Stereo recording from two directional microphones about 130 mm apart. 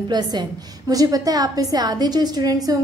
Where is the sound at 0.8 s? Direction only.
30° right (ahead or behind).